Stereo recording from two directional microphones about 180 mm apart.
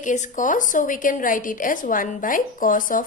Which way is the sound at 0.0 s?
45° left (ahead or behind).